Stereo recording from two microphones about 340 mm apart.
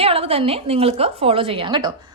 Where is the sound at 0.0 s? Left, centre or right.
Centre.